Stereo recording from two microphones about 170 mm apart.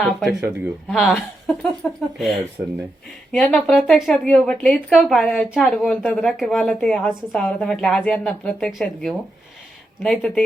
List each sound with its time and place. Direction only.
0.0 s a woman's voice: centre (ahead or behind)